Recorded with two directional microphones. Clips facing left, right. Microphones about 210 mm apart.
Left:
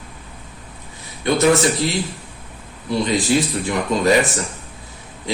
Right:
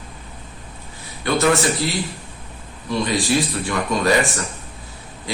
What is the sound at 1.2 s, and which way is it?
Speech, 20° left (ahead or behind).